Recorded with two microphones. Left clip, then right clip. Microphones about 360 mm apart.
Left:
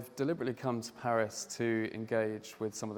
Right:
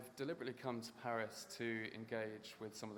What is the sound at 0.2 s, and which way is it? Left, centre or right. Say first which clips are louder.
Speech: left 11 dB; left.